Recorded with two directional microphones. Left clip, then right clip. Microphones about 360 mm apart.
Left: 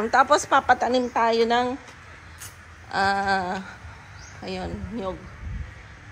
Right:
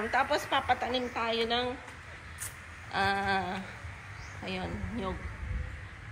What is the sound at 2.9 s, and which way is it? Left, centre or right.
A woman's voice, centre.